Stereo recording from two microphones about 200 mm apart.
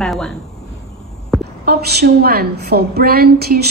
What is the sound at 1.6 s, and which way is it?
A woman's voice, 50° right (ahead or behind).